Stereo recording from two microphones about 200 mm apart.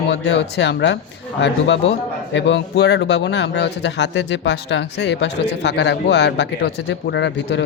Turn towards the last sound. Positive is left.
turn(degrees=60)  # may be behind; listen again after turning